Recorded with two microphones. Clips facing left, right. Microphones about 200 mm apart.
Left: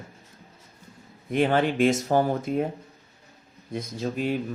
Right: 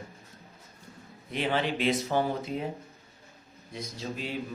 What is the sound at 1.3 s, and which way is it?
Speech, 50° left (ahead or behind).